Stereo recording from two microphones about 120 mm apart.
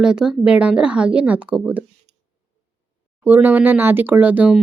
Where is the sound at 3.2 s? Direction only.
20° right (ahead or behind).